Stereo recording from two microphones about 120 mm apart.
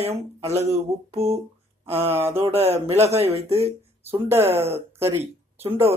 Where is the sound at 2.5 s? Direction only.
60° right (ahead or behind).